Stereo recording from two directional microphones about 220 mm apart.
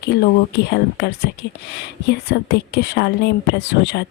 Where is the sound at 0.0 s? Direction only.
50° left (ahead or behind).